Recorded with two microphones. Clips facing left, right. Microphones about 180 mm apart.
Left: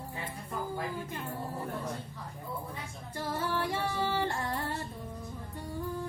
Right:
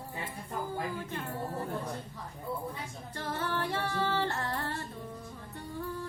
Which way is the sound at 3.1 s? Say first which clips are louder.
Left 1 dB; 10° left (ahead or behind).